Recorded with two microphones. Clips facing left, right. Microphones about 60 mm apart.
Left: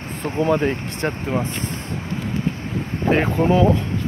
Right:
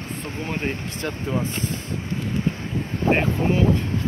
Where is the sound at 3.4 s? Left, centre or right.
Left.